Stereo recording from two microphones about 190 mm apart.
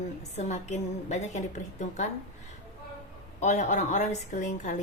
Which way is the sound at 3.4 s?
40° left (ahead or behind).